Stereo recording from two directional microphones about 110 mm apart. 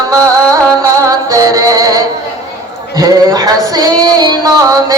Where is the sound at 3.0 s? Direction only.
35° right (ahead or behind).